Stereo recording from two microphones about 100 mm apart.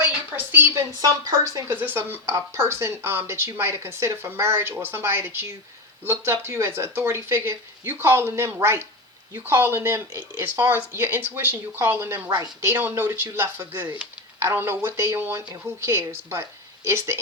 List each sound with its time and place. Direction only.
0.3 s a sound: 20° right (ahead or behind)
0.9 s a woman's voice: 35° right (ahead or behind)
1.6 s speech: 20° right (ahead or behind)